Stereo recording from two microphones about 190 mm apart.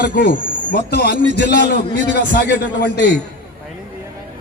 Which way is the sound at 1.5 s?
60° left (ahead or behind).